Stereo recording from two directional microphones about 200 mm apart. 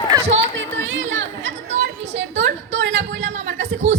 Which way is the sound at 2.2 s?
65° right (ahead or behind).